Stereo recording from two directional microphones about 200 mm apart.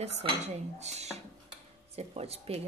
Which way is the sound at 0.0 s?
30° right (ahead or behind).